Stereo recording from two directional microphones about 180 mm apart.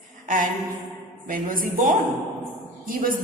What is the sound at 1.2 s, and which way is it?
Speech, 50° right (ahead or behind).